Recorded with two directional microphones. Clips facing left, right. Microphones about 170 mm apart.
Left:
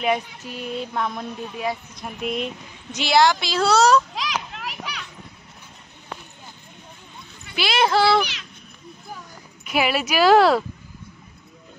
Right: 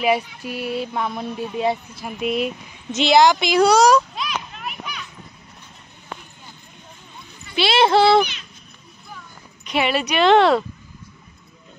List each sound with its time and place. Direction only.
0.0 s a woman's voice: 10° right (ahead or behind)
2.9 s speech: 20° right (ahead or behind)
4.1 s children playing: 90° left
7.5 s speech: 25° right (ahead or behind)
8.2 s a child's voice: 80° left
9.7 s a woman's voice: 5° left (ahead or behind)